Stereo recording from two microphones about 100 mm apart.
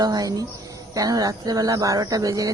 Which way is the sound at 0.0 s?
40° right (ahead or behind).